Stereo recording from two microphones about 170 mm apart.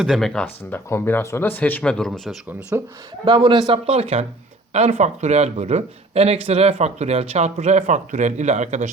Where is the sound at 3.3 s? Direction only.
25° right (ahead or behind).